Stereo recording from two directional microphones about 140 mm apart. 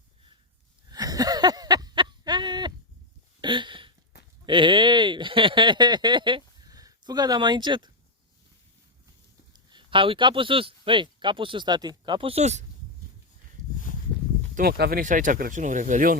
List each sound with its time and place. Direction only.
0.9 s a sound: 25° right (ahead or behind)
3.4 s hiccup: 35° right (ahead or behind)
4.4 s speech: 35° right (ahead or behind)
9.5 s speech: 30° right (ahead or behind); by 12.6 s 50° right (ahead or behind)
14.5 s speech: 90° right; by 16.1 s 70° right (ahead or behind)